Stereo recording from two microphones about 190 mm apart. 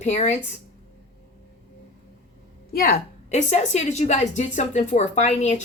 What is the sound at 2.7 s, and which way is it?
Speech, 50° left (ahead or behind).